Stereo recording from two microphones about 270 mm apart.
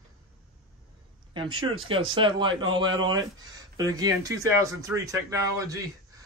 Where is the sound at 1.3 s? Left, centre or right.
Centre.